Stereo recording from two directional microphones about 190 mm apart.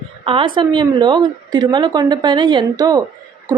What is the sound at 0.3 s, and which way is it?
A woman's voice, 25° right (ahead or behind).